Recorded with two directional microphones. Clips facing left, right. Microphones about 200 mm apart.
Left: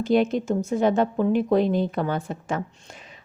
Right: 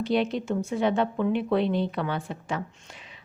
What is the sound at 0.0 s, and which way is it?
A woman's voice, 45° left (ahead or behind).